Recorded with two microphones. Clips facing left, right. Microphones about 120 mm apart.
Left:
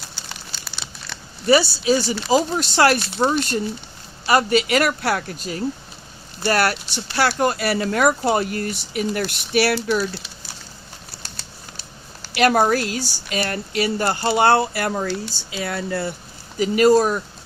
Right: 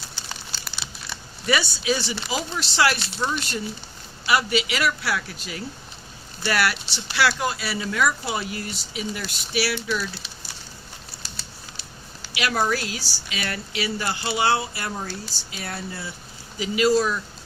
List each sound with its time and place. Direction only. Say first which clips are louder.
1.5 s speech: left 7 dB; 35° left (ahead or behind)
12.2 s speech: left 8 dB; 50° left (ahead or behind); by 16.1 s 65° left (ahead or behind)
16.6 s speech: left 5 dB; 45° left (ahead or behind)